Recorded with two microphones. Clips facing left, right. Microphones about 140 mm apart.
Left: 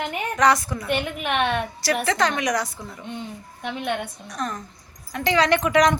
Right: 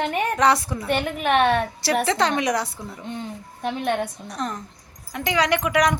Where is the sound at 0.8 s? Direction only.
40° right (ahead or behind).